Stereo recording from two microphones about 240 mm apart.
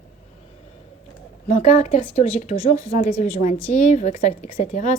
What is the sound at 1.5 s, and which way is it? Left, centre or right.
A woman's voice, left.